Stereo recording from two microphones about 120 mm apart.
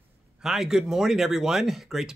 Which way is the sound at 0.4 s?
5° right (ahead or behind).